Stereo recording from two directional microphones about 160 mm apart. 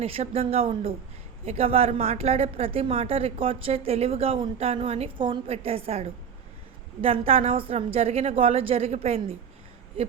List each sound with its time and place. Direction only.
0.0 s a woman's voice: 40° right (ahead or behind)